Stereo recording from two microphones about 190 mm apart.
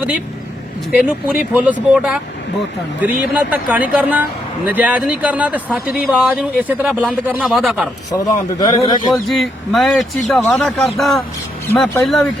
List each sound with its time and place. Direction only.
0.9 s a man's voice: 5° right (ahead or behind)
8.1 s a man's voice: 20° left (ahead or behind)
9.3 s speech: centre (ahead or behind)